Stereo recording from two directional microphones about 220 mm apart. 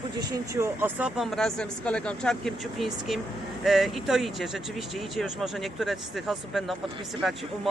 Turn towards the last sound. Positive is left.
turn(degrees=0)  # may be behind; listen again after turning